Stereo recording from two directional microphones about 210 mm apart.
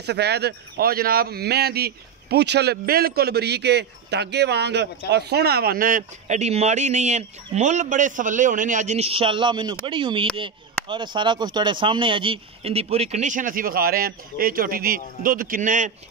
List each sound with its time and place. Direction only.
0.0 s a man's voice: 50° right (ahead or behind)